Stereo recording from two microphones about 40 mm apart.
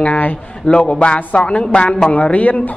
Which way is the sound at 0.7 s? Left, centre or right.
Left.